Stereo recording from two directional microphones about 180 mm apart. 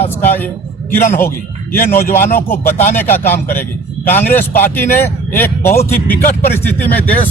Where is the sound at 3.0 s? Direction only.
10° left (ahead or behind).